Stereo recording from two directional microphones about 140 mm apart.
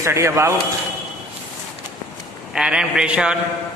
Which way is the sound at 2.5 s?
5° right (ahead or behind).